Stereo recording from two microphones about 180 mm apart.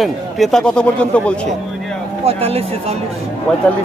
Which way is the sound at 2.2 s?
35° right (ahead or behind).